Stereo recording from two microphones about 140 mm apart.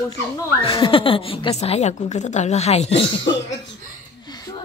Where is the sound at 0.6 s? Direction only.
40° left (ahead or behind).